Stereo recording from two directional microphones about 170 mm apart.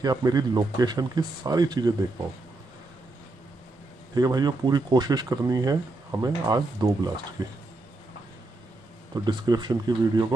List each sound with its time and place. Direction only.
0.0 s speech: 20° right (ahead or behind)
4.1 s speech: 20° right (ahead or behind)
9.1 s speech: 25° right (ahead or behind)